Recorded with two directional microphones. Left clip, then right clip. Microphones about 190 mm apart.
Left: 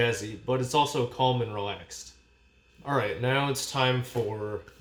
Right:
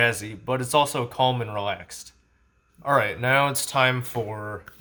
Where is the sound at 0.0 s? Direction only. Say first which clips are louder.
Right 5 dB; 15° right (ahead or behind).